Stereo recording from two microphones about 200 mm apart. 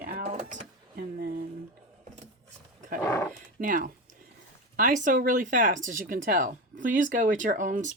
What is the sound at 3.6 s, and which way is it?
Speech, 45° right (ahead or behind).